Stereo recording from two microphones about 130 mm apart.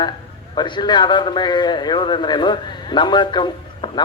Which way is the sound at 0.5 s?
35° left (ahead or behind).